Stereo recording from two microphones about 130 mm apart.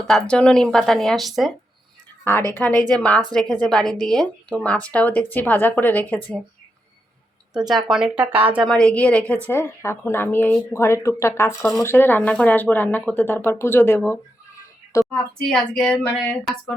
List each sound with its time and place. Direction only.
0.0 s a woman's voice: 5° left (ahead or behind)
2.6 s a woman's voice: 10° left (ahead or behind)
7.7 s speech: centre (ahead or behind)
8.6 s speech: 5° left (ahead or behind)
15.1 s a woman's voice: 5° left (ahead or behind)
16.4 s a woman's voice: 5° right (ahead or behind)